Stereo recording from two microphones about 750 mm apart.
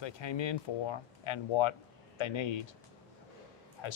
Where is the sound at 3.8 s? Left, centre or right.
Left.